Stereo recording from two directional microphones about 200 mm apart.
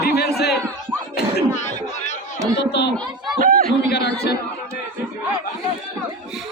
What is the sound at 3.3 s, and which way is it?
Chatter, 45° right (ahead or behind).